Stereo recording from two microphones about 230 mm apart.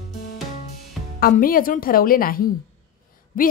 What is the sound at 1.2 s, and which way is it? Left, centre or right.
A woman's voice, left.